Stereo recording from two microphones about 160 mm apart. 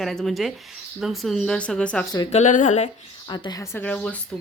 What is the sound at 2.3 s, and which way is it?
Speech, 50° left (ahead or behind).